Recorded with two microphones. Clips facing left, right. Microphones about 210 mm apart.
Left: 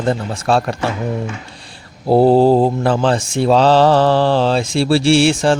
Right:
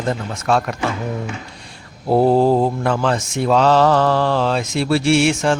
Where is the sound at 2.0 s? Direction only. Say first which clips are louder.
Left 3 dB; 30° left (ahead or behind).